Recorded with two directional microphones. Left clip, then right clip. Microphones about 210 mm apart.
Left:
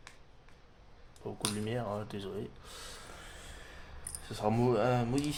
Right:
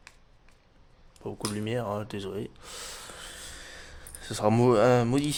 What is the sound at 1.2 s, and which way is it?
Speech, 35° right (ahead or behind).